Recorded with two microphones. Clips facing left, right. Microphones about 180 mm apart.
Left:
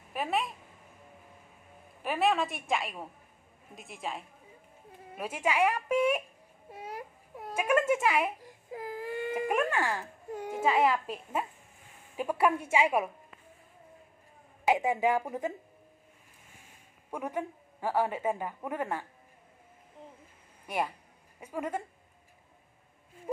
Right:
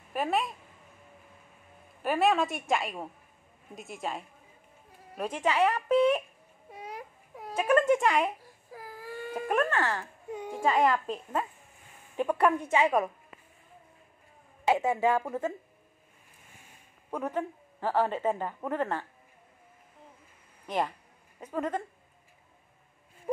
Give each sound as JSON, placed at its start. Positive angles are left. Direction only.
{"t": 0.1, "sound": "a woman's voice", "side_deg": 0}
{"t": 2.0, "sound": "a woman's voice", "side_deg": 0}
{"t": 6.7, "sound": "a sound", "side_deg": 5}
{"t": 8.4, "sound": "baby cry", "side_deg": 20}
{"t": 12.2, "sound": "a woman's voice", "side_deg": 5}
{"t": 14.7, "sound": "a woman's voice", "side_deg": 15}
{"t": 17.1, "sound": "a woman's voice", "side_deg": 10}
{"t": 20.6, "sound": "a woman's voice", "side_deg": 10}